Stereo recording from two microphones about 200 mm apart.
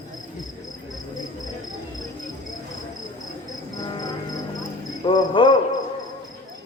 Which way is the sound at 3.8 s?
20° left (ahead or behind).